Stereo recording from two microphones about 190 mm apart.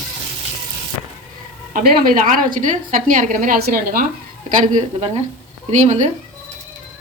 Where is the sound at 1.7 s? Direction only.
45° right (ahead or behind).